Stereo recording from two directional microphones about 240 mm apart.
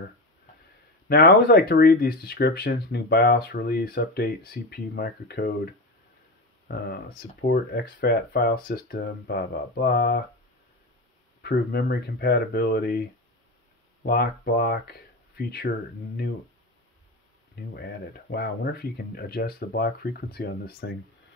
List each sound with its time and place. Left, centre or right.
1.0 s speech: left
6.7 s speech: left
11.4 s speech: left
14.0 s speech: left
17.7 s speech: left